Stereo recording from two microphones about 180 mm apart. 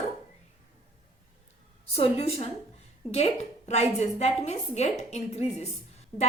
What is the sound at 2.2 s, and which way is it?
A woman's voice, 35° left (ahead or behind).